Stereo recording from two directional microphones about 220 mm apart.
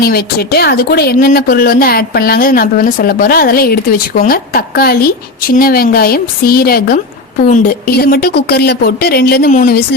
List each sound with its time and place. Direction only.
0.0 s a woman's voice: 45° left (ahead or behind)